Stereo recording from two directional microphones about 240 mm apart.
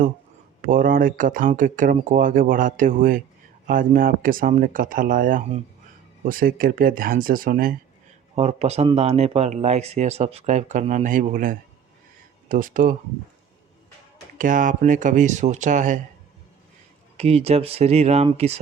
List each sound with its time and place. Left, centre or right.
0.6 s speech: right
8.4 s speech: right
14.3 s speech: right
17.2 s speech: right